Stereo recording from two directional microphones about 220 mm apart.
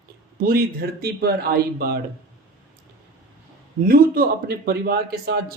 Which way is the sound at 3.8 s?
40° right (ahead or behind).